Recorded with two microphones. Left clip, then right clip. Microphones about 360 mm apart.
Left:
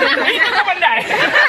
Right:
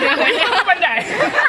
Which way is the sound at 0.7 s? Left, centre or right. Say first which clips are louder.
Left 1 dB; centre.